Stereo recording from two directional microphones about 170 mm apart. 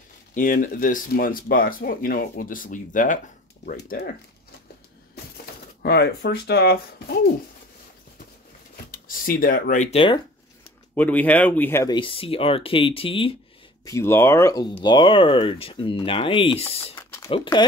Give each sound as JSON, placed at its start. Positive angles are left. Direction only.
{"t": 0.3, "sound": "speech", "side_deg": 50}
{"t": 5.8, "sound": "speech", "side_deg": 70}
{"t": 8.7, "sound": "speech", "side_deg": 55}
{"t": 11.0, "sound": "speech", "side_deg": 10}
{"t": 11.9, "sound": "speech", "side_deg": 30}
{"t": 13.8, "sound": "speech", "side_deg": 15}
{"t": 16.9, "sound": "a sound", "side_deg": 15}
{"t": 17.3, "sound": "speech", "side_deg": 25}